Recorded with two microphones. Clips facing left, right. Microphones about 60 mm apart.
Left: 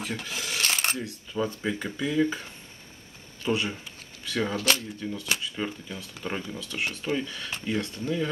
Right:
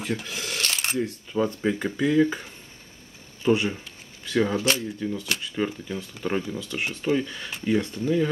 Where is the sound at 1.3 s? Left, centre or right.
Centre.